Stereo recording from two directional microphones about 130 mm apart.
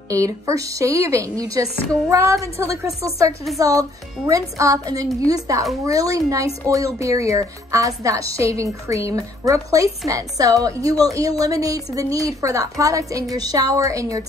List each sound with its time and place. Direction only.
0.1 s a woman's voice: 25° right (ahead or behind)